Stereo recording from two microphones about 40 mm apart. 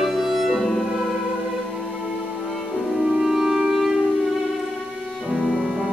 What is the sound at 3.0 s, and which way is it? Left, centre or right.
Music, centre.